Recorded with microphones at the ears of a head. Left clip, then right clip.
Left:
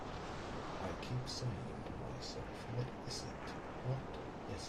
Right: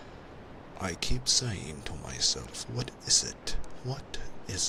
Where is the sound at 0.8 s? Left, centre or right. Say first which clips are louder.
Right 9 dB; right.